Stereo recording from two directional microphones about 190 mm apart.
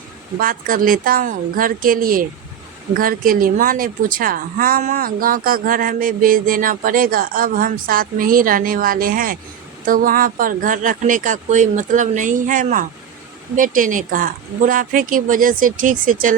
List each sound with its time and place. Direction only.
0.3 s a woman's voice: 50° right (ahead or behind)